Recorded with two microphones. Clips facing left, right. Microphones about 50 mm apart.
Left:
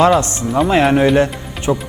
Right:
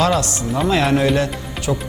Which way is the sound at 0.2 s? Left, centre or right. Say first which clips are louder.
Left 4 dB; left.